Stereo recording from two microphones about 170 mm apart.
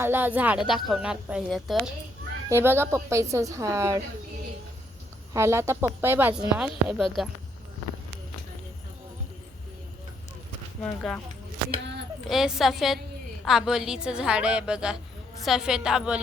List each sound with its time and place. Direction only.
0.0 s a woman's voice: 10° right (ahead or behind)
2.5 s speech: 15° right (ahead or behind)
5.3 s speech: 15° right (ahead or behind)
10.8 s speech: 10° left (ahead or behind)
12.3 s a woman's voice: centre (ahead or behind)